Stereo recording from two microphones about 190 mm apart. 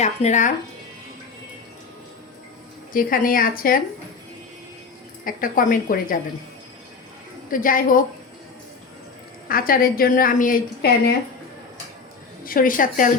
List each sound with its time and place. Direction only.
0.0 s speech: 35° left (ahead or behind)
2.9 s a woman's voice: 50° left (ahead or behind)
5.2 s a woman's voice: 45° left (ahead or behind)
7.5 s a woman's voice: 45° left (ahead or behind)
9.5 s a woman's voice: 50° left (ahead or behind)
12.5 s a woman's voice: 45° left (ahead or behind)